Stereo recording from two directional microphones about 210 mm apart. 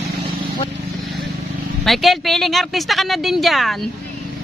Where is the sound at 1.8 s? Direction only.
Centre (ahead or behind).